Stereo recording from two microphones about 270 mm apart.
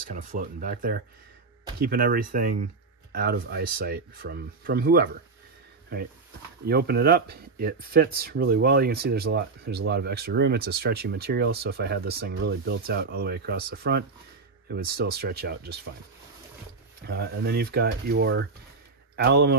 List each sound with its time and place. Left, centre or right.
0.1 s speech: right
6.6 s speech: right
17.0 s speech: right